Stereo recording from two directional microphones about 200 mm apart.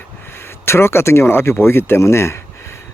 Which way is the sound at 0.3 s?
10° left (ahead or behind).